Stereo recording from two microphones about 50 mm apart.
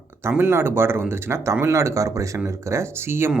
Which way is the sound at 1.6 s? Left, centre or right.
Right.